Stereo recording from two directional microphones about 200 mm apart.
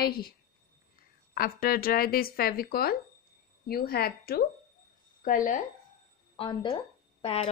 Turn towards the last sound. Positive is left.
turn(degrees=30)  # may be behind; listen again after turning